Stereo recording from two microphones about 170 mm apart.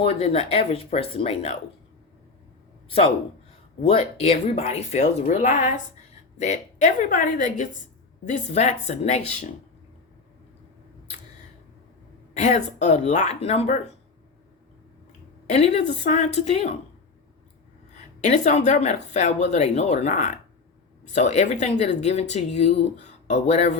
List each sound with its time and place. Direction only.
0.0 s speech: 35° left (ahead or behind)
3.8 s speech: 35° left (ahead or behind)
12.3 s speech: 45° left (ahead or behind)
15.4 s speech: 40° left (ahead or behind)
17.9 s speech: 45° left (ahead or behind)